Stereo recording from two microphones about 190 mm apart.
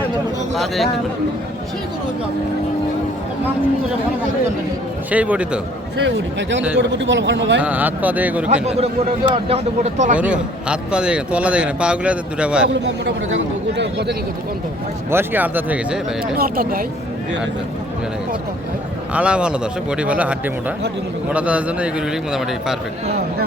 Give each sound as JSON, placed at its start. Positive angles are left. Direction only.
{"t": 0.5, "sound": "a man's voice", "side_deg": 0}
{"t": 5.1, "sound": "speech", "side_deg": -5}
{"t": 6.0, "sound": "a man's voice", "side_deg": -70}
{"t": 7.6, "sound": "speech", "side_deg": -10}
{"t": 8.6, "sound": "speech", "side_deg": -30}
{"t": 10.2, "sound": "a man's voice", "side_deg": -5}
{"t": 12.7, "sound": "a man's voice", "side_deg": -65}
{"t": 15.1, "sound": "speech", "side_deg": -10}
{"t": 16.4, "sound": "speech", "side_deg": -50}
{"t": 19.1, "sound": "a man's voice", "side_deg": -5}